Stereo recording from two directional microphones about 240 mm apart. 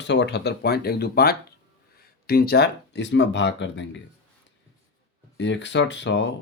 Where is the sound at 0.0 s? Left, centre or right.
Left.